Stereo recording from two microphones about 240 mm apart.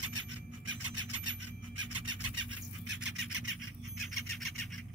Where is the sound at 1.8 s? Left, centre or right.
Right.